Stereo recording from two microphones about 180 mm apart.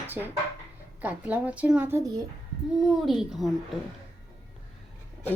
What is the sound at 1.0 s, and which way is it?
A woman's voice, 10° right (ahead or behind).